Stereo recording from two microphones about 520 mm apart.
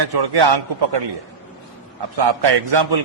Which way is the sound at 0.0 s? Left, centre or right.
Right.